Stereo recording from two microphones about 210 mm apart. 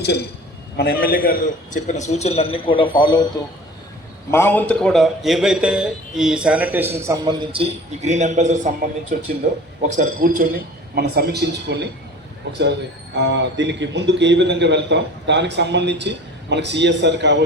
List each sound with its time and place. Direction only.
0.0 s a man's voice: 50° left (ahead or behind); by 3.2 s 20° left (ahead or behind)
4.3 s a man's voice: 10° left (ahead or behind); by 11.9 s 55° right (ahead or behind)
13.1 s a man's voice: 55° right (ahead or behind)